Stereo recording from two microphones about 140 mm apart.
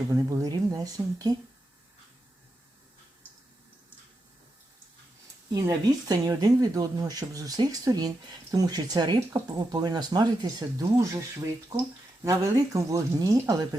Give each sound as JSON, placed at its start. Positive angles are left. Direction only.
{"t": 0.0, "sound": "speech", "side_deg": -25}
{"t": 5.5, "sound": "speech", "side_deg": -25}
{"t": 12.2, "sound": "speech", "side_deg": -20}